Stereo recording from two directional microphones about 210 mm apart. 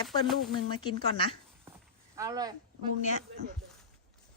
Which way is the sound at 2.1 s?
15° right (ahead or behind).